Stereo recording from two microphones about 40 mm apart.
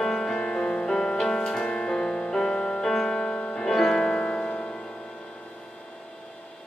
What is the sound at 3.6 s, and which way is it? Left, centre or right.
Music, centre.